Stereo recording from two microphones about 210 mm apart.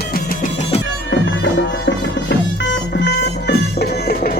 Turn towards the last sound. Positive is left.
turn(degrees=45)  # may be behind; listen again after turning